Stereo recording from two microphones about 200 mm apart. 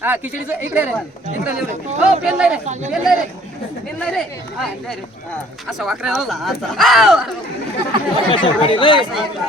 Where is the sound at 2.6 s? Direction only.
35° right (ahead or behind).